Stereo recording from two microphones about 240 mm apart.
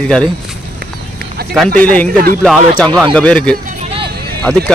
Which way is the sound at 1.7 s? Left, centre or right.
Centre.